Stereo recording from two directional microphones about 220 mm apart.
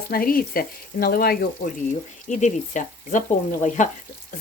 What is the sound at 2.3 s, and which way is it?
Speech, 35° left (ahead or behind).